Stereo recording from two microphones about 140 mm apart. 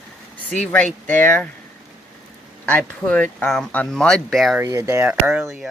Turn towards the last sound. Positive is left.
turn(degrees=-15)  # may be behind; listen again after turning